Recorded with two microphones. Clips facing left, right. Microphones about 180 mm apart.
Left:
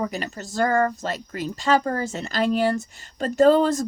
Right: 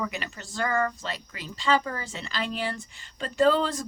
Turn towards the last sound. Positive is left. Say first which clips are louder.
# left 6 dB
turn(degrees=45)  # may be behind; listen again after turning